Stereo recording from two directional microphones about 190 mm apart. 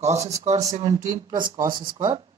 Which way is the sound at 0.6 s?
20° right (ahead or behind).